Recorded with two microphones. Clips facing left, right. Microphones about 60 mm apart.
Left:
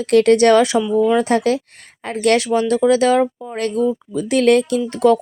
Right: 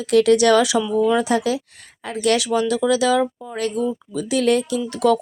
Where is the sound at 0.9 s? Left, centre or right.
Left.